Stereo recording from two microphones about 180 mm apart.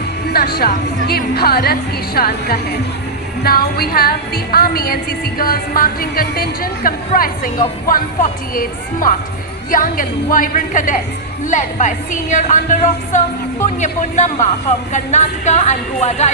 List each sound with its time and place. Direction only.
0.3 s speech: 60° left (ahead or behind); by 16.3 s 40° left (ahead or behind)